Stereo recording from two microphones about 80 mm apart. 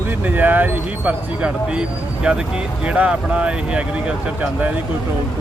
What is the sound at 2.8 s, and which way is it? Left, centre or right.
Speech, centre.